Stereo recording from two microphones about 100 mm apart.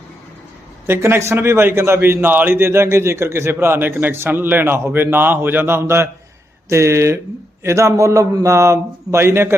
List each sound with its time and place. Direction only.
0.9 s a man's voice: 25° right (ahead or behind)